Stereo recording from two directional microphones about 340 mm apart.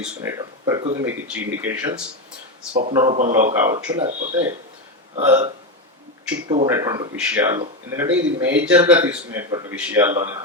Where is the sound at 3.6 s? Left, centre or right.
Centre.